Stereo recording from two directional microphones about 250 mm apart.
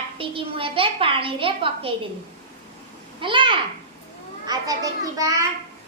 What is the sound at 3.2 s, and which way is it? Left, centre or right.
A woman's voice, centre.